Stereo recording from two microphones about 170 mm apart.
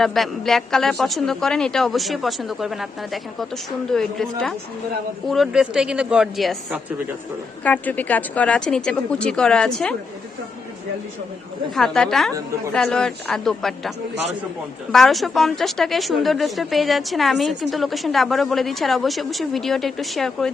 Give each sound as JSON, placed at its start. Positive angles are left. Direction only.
{"t": 0.0, "sound": "a woman's voice", "side_deg": 0}
{"t": 11.7, "sound": "a woman's voice", "side_deg": 0}
{"t": 14.9, "sound": "a woman's voice", "side_deg": 0}